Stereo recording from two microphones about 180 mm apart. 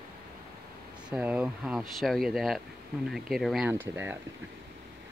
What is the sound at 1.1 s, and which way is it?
Speech, 5° right (ahead or behind).